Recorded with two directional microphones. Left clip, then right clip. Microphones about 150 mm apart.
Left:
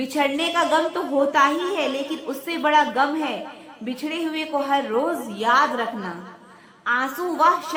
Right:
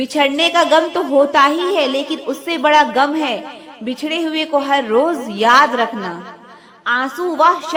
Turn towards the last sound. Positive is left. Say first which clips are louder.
# right 5 dB
turn(degrees=-25)  # may be behind; listen again after turning